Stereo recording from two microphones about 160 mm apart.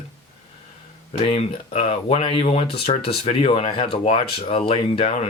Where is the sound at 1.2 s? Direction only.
40° left (ahead or behind).